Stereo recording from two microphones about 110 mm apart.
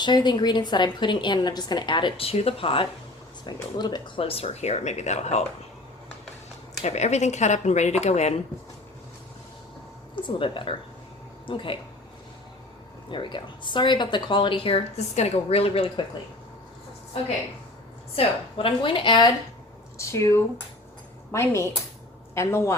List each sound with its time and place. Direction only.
0.0 s speech: 45° left (ahead or behind)
3.4 s speech: 40° left (ahead or behind); by 5.5 s 85° left
6.8 s a woman's voice: 90° left
10.2 s speech: 50° left (ahead or behind)
13.1 s speech: 45° left (ahead or behind)
18.2 s speech: 55° left (ahead or behind)
20.0 s speech: 25° left (ahead or behind)